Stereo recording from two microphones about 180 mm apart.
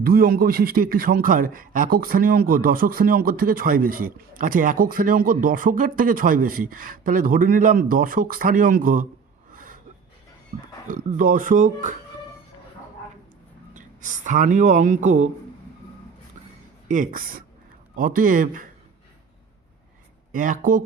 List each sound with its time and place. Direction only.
0.0 s a man's voice: 55° right (ahead or behind)
9.5 s a sound: 50° right (ahead or behind)
10.8 s a man's voice: 50° right (ahead or behind)
13.7 s speech: 45° right (ahead or behind)
16.9 s a man's voice: 50° right (ahead or behind)
20.3 s a man's voice: 45° right (ahead or behind)